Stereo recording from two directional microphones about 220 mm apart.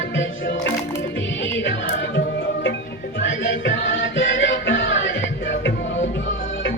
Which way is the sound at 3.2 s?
55° left (ahead or behind).